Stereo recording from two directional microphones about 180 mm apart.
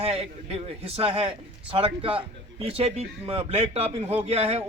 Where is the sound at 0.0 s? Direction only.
35° right (ahead or behind).